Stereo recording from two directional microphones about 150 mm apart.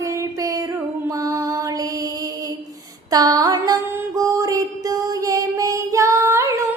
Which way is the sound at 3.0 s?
25° right (ahead or behind).